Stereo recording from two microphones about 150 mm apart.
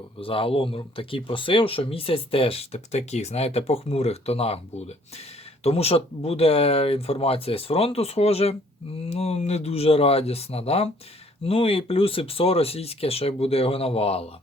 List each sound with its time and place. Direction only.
0.2 s speech: 40° left (ahead or behind)